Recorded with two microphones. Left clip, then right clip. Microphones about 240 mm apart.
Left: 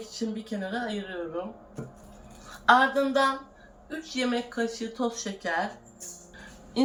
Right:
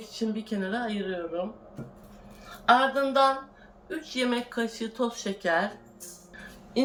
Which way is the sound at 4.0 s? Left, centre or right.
Centre.